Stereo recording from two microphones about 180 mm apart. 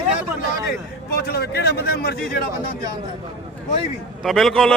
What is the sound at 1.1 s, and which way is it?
Speech, 60° left (ahead or behind).